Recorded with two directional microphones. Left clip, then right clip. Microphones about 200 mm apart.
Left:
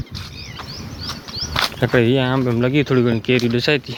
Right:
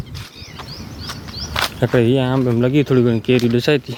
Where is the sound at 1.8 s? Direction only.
15° right (ahead or behind); by 3.9 s 35° right (ahead or behind).